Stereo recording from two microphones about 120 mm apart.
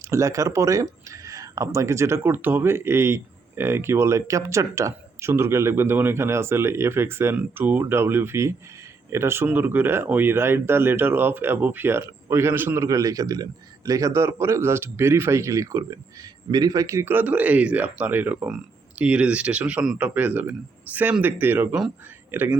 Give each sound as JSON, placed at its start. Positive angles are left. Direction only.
{"t": 0.0, "sound": "a man's voice", "side_deg": -25}